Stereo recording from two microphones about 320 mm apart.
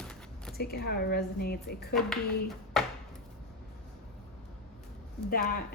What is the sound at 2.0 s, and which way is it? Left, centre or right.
Speech, centre.